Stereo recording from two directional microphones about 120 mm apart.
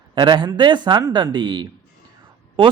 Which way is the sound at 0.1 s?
40° right (ahead or behind).